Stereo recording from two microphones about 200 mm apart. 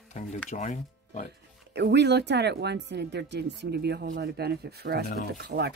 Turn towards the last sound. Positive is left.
turn(degrees=-55)  # may be behind; listen again after turning